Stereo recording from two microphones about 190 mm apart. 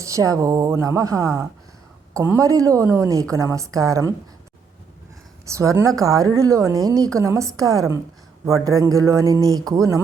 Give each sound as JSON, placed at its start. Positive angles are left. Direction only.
{"t": 0.0, "sound": "a woman's voice", "side_deg": -15}
{"t": 5.5, "sound": "a woman's voice", "side_deg": -15}